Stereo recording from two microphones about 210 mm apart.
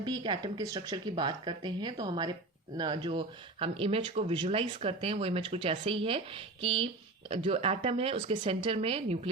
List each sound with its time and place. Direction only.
0.0 s speech: 20° right (ahead or behind)